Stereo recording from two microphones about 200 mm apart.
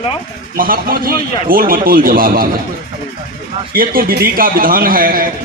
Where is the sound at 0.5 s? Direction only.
45° right (ahead or behind).